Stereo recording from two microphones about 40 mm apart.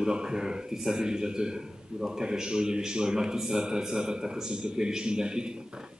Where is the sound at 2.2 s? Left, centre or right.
Centre.